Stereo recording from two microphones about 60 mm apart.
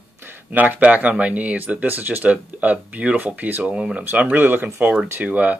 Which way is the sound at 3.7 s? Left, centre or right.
Centre.